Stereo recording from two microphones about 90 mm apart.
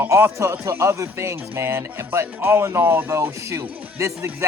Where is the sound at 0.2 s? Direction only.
35° right (ahead or behind).